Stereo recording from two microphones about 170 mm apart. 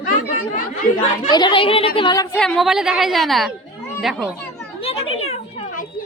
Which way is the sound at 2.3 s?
5° left (ahead or behind).